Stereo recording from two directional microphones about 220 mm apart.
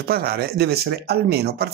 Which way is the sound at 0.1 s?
45° right (ahead or behind).